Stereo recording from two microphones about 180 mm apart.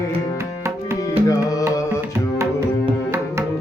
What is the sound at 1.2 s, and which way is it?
Music, 20° left (ahead or behind).